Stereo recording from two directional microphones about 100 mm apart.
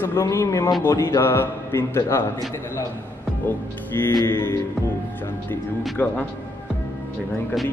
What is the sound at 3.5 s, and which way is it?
Speech, 20° left (ahead or behind).